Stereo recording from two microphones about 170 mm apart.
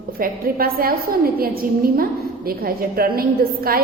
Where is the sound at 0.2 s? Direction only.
60° right (ahead or behind).